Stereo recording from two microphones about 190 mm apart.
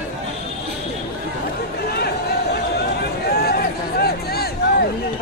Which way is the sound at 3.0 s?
55° left (ahead or behind).